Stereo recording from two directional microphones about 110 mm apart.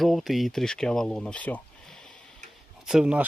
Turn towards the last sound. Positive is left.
turn(degrees=-10)  # may be behind; listen again after turning